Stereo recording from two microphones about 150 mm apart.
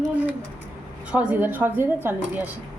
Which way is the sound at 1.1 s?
10° right (ahead or behind).